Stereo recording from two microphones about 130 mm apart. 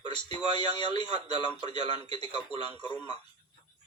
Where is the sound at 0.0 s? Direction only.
35° left (ahead or behind).